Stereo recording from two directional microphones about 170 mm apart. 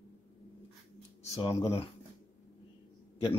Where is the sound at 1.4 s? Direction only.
30° left (ahead or behind).